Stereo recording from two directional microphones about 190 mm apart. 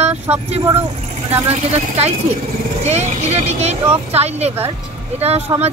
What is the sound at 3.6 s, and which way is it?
Speech, 35° right (ahead or behind).